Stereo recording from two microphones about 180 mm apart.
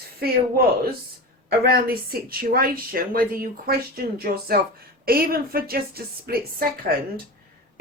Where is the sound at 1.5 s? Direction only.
60° right (ahead or behind).